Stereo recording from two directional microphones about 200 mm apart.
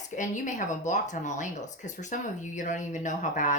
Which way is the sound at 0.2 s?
40° left (ahead or behind).